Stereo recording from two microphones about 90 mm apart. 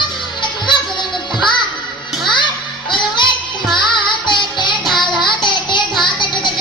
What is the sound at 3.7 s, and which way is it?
Music, 60° left (ahead or behind).